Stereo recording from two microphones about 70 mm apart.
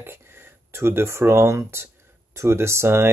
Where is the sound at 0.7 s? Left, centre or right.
Right.